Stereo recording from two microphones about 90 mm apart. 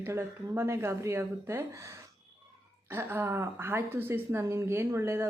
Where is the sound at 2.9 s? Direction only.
25° right (ahead or behind).